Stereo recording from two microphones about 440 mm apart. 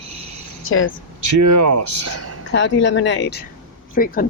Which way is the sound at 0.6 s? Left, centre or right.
Left.